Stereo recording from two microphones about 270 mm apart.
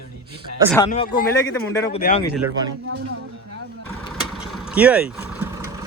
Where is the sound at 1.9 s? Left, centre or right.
Left.